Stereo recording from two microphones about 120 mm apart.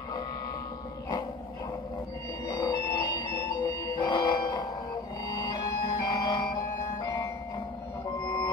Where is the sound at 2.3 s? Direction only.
30° left (ahead or behind).